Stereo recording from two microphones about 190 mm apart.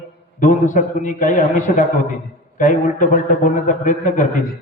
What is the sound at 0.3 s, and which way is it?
A man's voice, 40° left (ahead or behind).